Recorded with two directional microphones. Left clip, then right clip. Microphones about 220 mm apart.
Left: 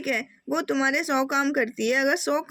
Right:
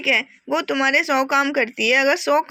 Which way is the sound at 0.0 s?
15° left (ahead or behind).